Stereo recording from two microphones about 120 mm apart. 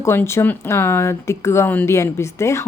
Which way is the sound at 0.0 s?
20° left (ahead or behind).